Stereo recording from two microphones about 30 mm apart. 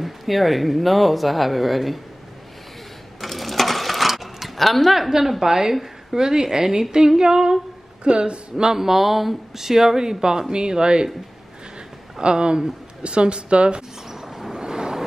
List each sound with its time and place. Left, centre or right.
0.0 s speech: centre
3.2 s sewing machine: centre
5.4 s speech: centre
8.0 s speech: right
8.7 s speech: centre; by 11.1 s right
12.2 s speech: right
14.0 s a sound: centre
14.5 s vehicle: right